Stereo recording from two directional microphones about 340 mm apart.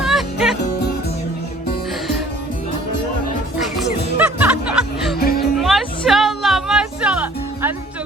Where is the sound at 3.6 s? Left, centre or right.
Centre.